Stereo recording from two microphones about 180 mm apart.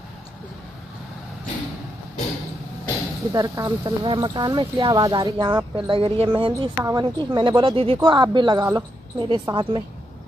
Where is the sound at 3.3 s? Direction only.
20° right (ahead or behind).